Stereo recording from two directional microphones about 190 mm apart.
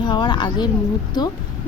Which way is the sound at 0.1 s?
25° left (ahead or behind).